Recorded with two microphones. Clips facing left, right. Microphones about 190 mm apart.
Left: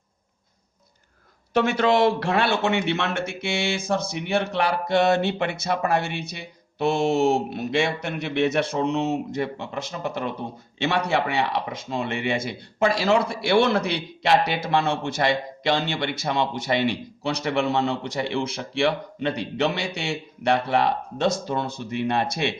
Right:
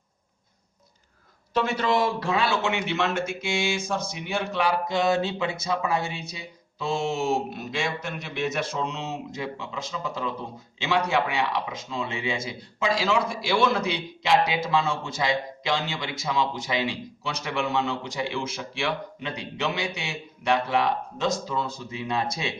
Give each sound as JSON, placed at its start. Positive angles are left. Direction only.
{"t": 1.5, "sound": "speech", "side_deg": 70}